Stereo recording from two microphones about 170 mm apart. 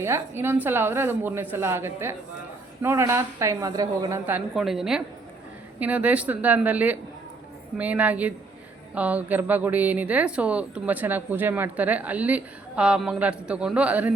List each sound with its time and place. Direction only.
0.0 s speech: 15° right (ahead or behind)